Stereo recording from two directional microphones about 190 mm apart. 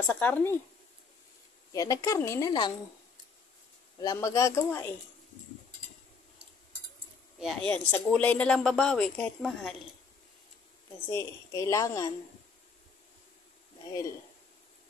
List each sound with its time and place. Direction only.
0.0 s a woman's voice: 10° left (ahead or behind)
1.7 s a woman's voice: 20° left (ahead or behind)
4.0 s a woman's voice: 20° left (ahead or behind)
7.3 s speech: centre (ahead or behind)
11.1 s a woman's voice: 15° left (ahead or behind)